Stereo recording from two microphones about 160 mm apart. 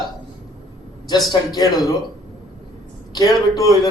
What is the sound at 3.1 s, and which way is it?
Speech, 25° left (ahead or behind).